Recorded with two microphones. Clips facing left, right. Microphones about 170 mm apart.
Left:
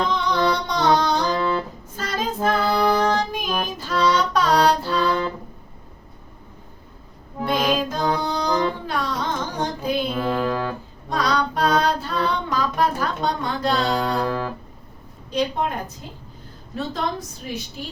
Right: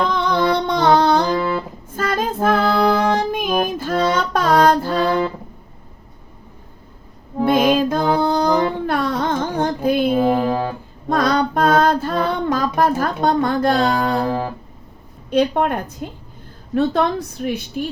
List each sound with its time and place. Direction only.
0.1 s music: 55° right (ahead or behind)
2.0 s child singing: 50° right (ahead or behind)
3.3 s music: 50° right (ahead or behind)
7.4 s music: 50° right (ahead or behind)
10.2 s music: 25° right (ahead or behind)
11.1 s female singing: 50° right (ahead or behind)
14.3 s music: 35° right (ahead or behind)
15.3 s a woman's voice: 60° right (ahead or behind)